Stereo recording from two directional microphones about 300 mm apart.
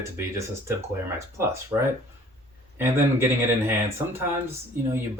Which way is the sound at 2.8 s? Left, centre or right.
Centre.